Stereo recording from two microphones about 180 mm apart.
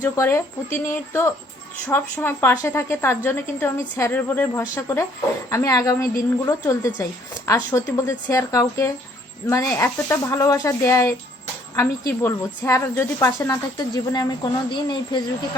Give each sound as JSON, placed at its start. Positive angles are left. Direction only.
{"t": 0.0, "sound": "a woman's voice", "side_deg": 15}